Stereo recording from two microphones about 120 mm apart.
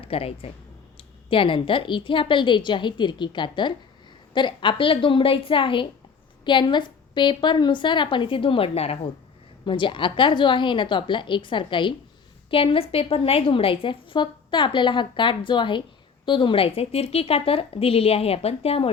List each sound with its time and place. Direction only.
0.0 s a woman's voice: 50° left (ahead or behind)
9.6 s a woman's voice: 45° left (ahead or behind)